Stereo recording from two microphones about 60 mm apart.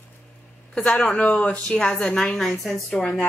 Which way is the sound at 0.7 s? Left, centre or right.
Centre.